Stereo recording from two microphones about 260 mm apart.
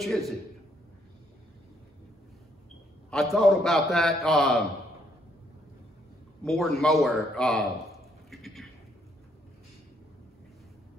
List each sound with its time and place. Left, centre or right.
0.0 s a man's voice: centre
3.1 s a man's voice: centre
6.4 s a man's voice: centre
8.3 s a sound: centre